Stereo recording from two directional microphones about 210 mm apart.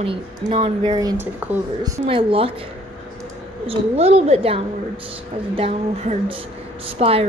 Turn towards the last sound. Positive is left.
turn(degrees=-25)  # may be behind; listen again after turning